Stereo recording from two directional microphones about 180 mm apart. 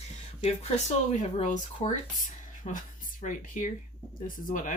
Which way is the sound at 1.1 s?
40° left (ahead or behind).